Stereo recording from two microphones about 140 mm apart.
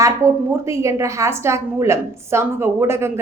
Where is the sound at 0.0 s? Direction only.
20° right (ahead or behind).